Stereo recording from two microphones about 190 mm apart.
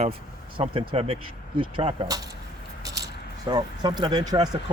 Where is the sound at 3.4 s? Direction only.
20° right (ahead or behind).